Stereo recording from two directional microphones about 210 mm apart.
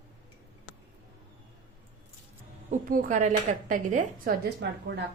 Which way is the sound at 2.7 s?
40° right (ahead or behind).